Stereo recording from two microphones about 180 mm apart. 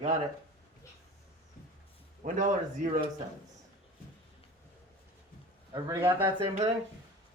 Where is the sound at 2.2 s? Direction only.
45° right (ahead or behind).